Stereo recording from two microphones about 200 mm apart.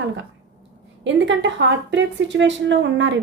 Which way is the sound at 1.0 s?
65° right (ahead or behind).